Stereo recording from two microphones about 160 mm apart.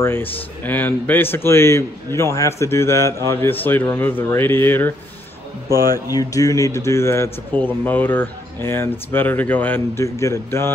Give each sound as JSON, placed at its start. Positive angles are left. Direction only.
{"t": 0.0, "sound": "a man's voice", "side_deg": 15}